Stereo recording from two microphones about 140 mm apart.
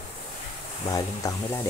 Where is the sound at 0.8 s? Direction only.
25° left (ahead or behind).